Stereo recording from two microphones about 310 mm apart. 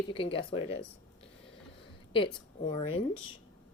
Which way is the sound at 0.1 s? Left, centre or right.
Centre.